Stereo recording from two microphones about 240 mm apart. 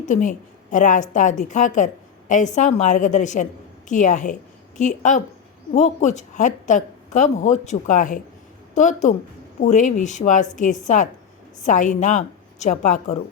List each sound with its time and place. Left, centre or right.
0.0 s a woman's voice: left